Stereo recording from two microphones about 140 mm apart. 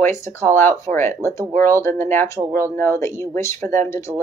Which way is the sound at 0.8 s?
15° left (ahead or behind).